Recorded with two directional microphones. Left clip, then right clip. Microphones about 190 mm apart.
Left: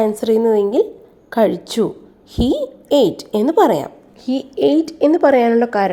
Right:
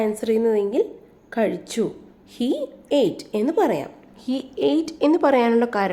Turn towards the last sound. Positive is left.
turn(degrees=10)  # may be behind; listen again after turning